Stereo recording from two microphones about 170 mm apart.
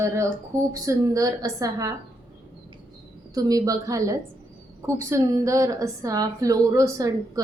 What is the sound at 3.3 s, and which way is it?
Speech, 20° right (ahead or behind).